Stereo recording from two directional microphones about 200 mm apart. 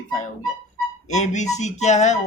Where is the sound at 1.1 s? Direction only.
35° left (ahead or behind).